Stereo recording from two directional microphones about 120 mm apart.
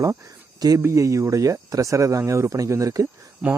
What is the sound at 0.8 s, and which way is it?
Speech, 25° right (ahead or behind).